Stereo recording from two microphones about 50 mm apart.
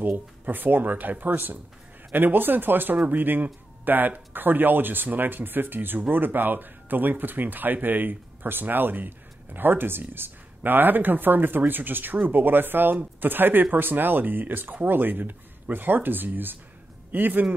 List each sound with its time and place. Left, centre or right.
0.0 s speech: right